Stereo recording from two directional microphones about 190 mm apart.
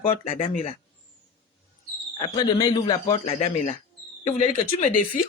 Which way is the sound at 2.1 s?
20° left (ahead or behind).